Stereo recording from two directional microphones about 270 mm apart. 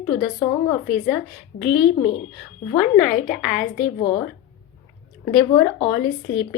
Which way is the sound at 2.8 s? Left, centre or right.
Centre.